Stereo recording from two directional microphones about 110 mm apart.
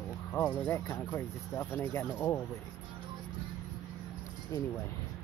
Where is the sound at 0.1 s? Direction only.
20° left (ahead or behind).